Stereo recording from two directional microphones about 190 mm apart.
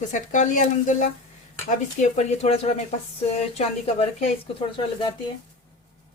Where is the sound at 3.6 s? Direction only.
35° left (ahead or behind).